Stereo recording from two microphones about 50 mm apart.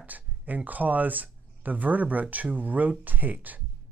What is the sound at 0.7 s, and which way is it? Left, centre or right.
Speech, right.